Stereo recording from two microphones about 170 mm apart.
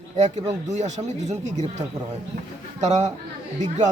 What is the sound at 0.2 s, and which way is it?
Speech, 45° right (ahead or behind).